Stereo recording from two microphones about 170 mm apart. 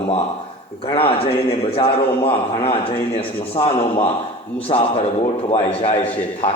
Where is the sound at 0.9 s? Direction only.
35° left (ahead or behind).